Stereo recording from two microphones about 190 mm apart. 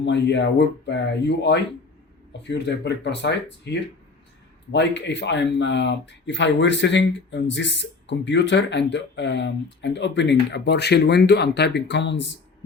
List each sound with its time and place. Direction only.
0.0 s speech: 65° left (ahead or behind)